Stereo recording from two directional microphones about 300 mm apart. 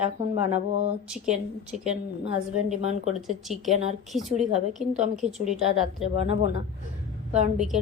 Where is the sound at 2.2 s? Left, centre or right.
Right.